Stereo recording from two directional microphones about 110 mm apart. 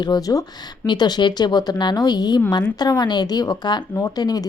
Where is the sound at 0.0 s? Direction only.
35° left (ahead or behind).